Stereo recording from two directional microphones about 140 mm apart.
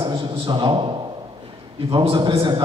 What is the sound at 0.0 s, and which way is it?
Speech, 40° right (ahead or behind).